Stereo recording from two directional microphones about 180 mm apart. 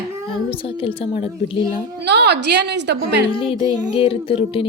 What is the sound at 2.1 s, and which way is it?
Speech, 65° right (ahead or behind).